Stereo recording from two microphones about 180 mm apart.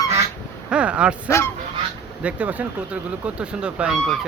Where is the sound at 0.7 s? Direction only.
5° right (ahead or behind).